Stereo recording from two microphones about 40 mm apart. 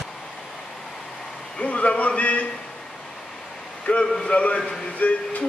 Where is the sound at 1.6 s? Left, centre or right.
Left.